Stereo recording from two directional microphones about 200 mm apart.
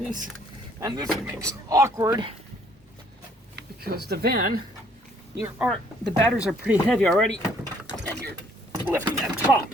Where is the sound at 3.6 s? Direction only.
50° right (ahead or behind).